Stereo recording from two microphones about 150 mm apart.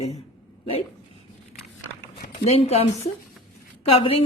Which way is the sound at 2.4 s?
45° left (ahead or behind).